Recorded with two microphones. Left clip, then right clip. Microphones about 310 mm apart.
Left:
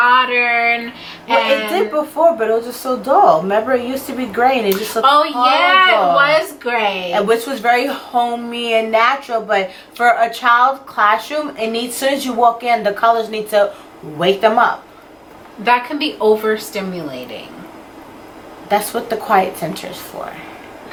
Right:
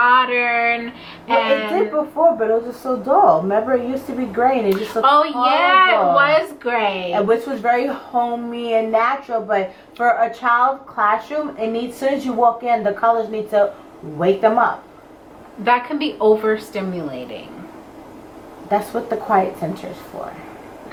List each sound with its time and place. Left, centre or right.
0.0 s a sound: centre
2.0 s a woman's voice: centre
12.3 s speech: right
12.5 s a woman's voice: centre
18.7 s speech: centre